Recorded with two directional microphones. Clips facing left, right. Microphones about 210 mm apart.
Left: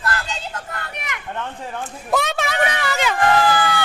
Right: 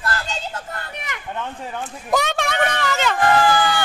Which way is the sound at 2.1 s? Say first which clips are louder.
Even; centre (ahead or behind).